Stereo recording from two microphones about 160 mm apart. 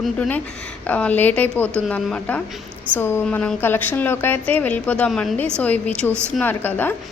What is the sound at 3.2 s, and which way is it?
A woman's voice, 5° left (ahead or behind).